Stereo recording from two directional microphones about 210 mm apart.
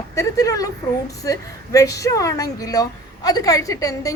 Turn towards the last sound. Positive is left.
turn(degrees=15)  # may be behind; listen again after turning